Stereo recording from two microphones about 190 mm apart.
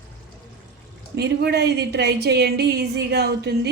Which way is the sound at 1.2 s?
60° right (ahead or behind).